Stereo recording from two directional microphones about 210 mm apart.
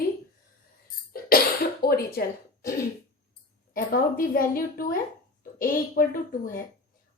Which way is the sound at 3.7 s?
40° left (ahead or behind).